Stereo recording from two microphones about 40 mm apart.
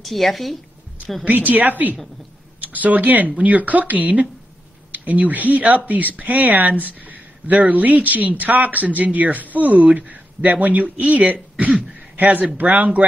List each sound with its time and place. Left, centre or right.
0.0 s a woman's voice: centre
1.2 s speech: right
11.3 s speech: right
12.2 s speech: right